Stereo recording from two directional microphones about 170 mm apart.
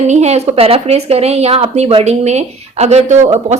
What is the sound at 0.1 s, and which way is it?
Speech, 40° right (ahead or behind).